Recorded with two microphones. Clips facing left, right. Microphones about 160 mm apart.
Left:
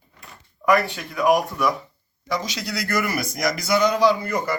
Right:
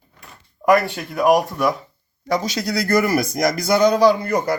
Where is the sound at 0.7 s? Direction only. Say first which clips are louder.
Right 3 dB; 40° right (ahead or behind).